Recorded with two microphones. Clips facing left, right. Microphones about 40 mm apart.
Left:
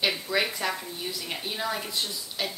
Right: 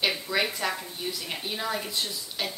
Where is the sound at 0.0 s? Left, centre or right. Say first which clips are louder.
Even; centre.